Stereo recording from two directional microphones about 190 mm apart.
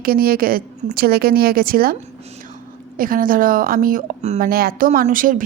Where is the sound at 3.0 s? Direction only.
45° right (ahead or behind).